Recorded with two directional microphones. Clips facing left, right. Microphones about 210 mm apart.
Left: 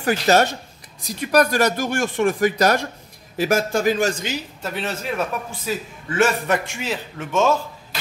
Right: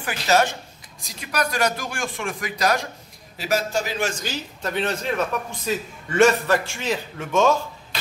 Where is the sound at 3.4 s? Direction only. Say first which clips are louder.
Left 5 dB; 50° left (ahead or behind).